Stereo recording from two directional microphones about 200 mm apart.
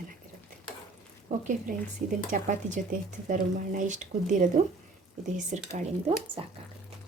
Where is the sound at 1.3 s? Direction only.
40° right (ahead or behind).